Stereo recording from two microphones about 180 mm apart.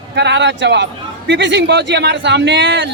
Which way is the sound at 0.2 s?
75° right (ahead or behind).